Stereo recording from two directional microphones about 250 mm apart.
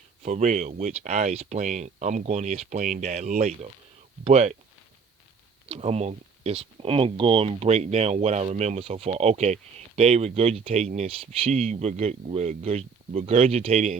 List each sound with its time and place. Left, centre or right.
0.2 s speech: right
5.6 s speech: right